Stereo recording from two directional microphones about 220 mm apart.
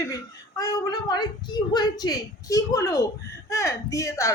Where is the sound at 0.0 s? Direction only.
15° left (ahead or behind).